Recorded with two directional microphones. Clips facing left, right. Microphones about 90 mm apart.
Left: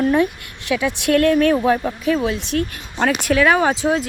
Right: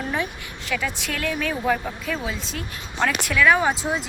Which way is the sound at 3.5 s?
80° left.